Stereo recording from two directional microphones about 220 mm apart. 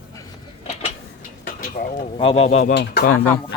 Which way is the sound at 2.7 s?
50° left (ahead or behind).